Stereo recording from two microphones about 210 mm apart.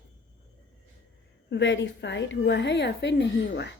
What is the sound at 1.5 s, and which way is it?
A woman's voice, 55° left (ahead or behind).